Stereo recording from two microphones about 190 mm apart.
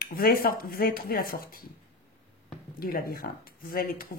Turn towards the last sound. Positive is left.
turn(degrees=50)  # may be behind; listen again after turning